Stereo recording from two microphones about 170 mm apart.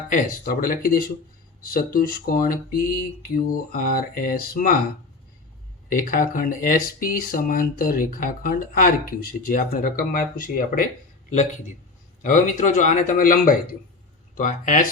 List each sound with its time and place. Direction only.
0.1 s speech: 55° left (ahead or behind)
5.9 s speech: 55° left (ahead or behind)
12.2 s speech: 50° left (ahead or behind)